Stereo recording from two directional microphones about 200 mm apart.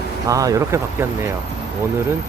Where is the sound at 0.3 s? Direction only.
15° right (ahead or behind).